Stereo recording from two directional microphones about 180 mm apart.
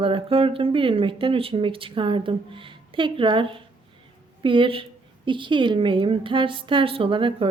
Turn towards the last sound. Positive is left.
turn(degrees=-30)  # may be behind; listen again after turning